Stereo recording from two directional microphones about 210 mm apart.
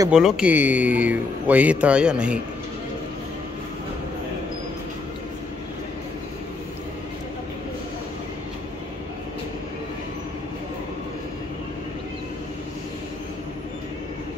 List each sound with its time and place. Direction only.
0.1 s speech: 5° right (ahead or behind)